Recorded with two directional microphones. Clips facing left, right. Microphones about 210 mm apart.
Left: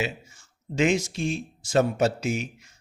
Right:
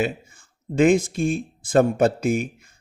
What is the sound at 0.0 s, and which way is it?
A man's voice, 55° right (ahead or behind).